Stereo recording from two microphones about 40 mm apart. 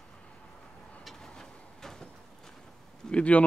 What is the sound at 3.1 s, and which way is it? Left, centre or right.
Speech, left.